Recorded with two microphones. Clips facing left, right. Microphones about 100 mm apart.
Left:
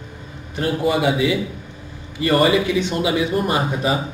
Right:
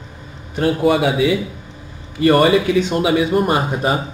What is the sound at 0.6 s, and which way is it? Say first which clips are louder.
A man's voice: right 4 dB; 60° right (ahead or behind).